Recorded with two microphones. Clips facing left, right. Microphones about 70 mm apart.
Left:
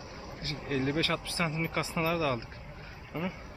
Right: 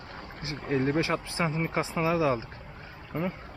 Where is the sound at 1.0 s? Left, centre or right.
Right.